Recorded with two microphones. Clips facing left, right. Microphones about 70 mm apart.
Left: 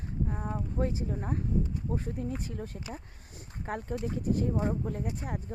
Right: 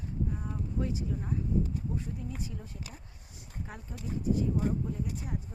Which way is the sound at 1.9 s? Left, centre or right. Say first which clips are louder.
Left 4 dB; left.